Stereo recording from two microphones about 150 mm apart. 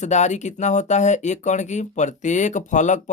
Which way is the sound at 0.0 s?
50° left (ahead or behind).